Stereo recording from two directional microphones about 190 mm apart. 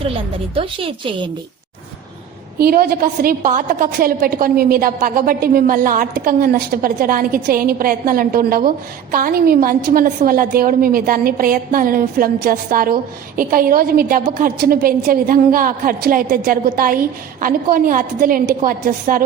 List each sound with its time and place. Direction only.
0.5 s a woman's voice: 30° right (ahead or behind)
2.6 s a woman's voice: 55° right (ahead or behind)